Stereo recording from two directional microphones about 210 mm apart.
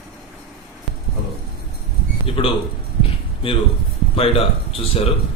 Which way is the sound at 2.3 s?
25° left (ahead or behind).